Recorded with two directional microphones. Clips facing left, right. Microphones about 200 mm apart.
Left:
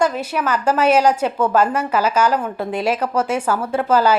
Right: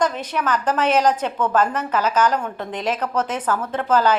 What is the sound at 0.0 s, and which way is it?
A woman's voice, 10° left (ahead or behind).